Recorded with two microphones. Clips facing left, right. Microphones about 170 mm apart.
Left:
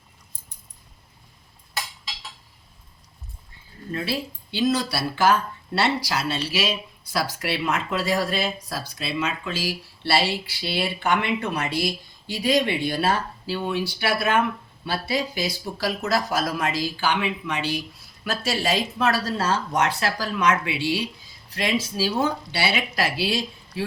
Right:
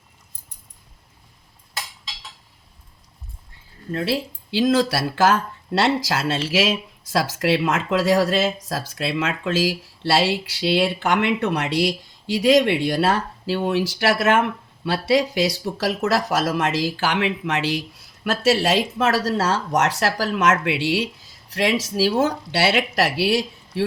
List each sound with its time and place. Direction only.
3.9 s speech: 80° right